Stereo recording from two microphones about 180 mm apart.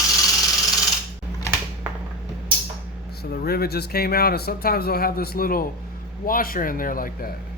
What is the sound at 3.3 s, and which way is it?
A man's voice, 60° left (ahead or behind).